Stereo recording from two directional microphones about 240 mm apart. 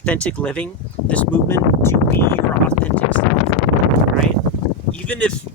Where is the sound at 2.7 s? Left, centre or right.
Centre.